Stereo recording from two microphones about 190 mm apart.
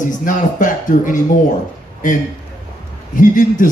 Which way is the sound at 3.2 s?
45° left (ahead or behind).